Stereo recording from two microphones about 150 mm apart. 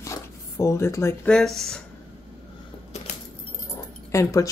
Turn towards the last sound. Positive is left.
turn(degrees=20)  # may be behind; listen again after turning